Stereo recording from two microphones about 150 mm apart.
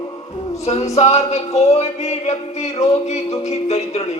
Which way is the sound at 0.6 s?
45° left (ahead or behind).